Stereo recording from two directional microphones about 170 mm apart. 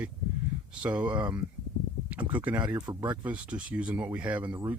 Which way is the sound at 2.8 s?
25° right (ahead or behind).